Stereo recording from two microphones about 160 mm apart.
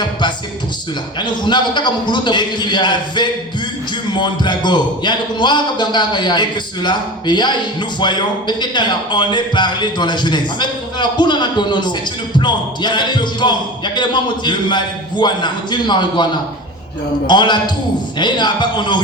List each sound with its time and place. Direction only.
0.0 s a man's voice: 30° left (ahead or behind)